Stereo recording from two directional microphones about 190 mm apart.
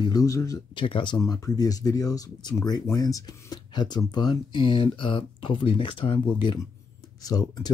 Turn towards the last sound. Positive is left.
turn(degrees=20)  # may be behind; listen again after turning